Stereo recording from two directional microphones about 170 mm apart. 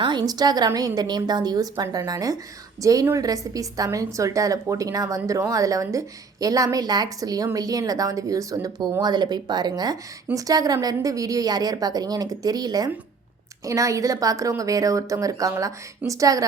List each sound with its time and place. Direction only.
0.0 s a woman's voice: 25° right (ahead or behind)